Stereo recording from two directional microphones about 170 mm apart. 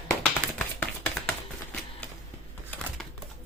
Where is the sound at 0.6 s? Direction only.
10° left (ahead or behind).